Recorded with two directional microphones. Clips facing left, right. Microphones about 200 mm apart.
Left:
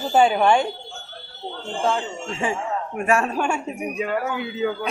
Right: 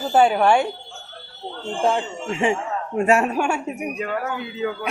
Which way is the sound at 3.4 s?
5° right (ahead or behind).